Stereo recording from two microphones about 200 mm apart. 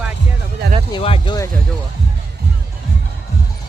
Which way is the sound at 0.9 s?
25° left (ahead or behind).